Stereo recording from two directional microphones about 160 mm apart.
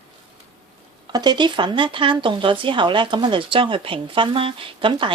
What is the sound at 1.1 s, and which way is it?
Speech, 25° right (ahead or behind).